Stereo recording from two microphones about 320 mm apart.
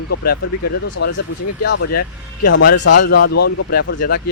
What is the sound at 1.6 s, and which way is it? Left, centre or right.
Speech, left.